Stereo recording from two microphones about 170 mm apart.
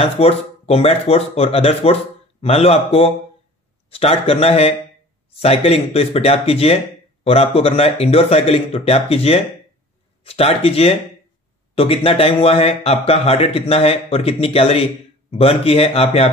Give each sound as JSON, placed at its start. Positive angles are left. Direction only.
{"t": 0.0, "sound": "speech", "side_deg": 35}